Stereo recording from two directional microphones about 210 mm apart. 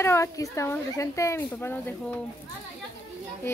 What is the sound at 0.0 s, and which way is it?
A woman's voice, 15° left (ahead or behind).